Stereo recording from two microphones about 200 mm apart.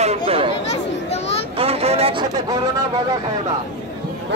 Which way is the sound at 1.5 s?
30° right (ahead or behind).